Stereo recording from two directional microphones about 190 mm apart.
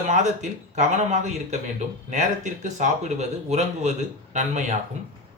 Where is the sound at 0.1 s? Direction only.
40° right (ahead or behind).